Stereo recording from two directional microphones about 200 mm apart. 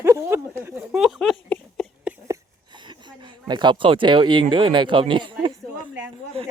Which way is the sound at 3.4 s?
25° right (ahead or behind).